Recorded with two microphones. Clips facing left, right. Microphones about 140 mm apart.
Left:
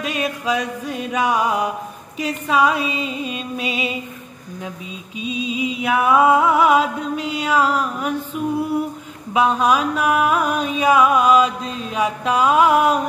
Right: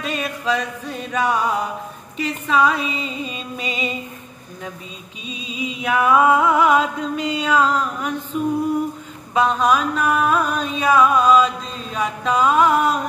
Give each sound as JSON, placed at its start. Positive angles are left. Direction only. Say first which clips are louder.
{"t": 0.0, "sound": "music", "louder": "left 1 dB", "side_deg": 15}
{"t": 5.8, "sound": "music", "louder": "even", "side_deg": 10}